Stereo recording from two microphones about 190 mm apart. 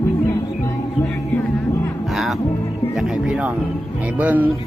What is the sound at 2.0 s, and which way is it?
Music, centre (ahead or behind).